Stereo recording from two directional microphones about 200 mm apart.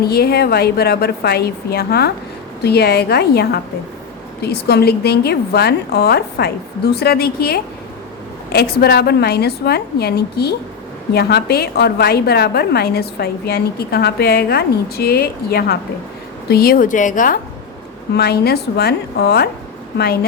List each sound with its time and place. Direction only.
0.0 s a woman's voice: 50° left (ahead or behind)
8.8 s a woman's voice: 50° left (ahead or behind)
18.1 s a woman's voice: 55° left (ahead or behind)